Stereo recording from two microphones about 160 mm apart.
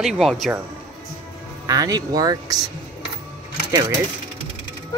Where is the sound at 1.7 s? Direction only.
25° right (ahead or behind).